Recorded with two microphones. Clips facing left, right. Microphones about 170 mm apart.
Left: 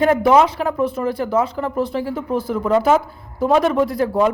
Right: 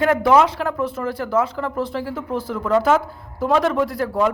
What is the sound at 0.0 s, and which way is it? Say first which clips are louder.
Speech: left 2 dB; 15° left (ahead or behind).